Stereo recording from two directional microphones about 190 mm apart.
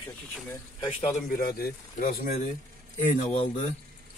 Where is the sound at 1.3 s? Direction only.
50° left (ahead or behind).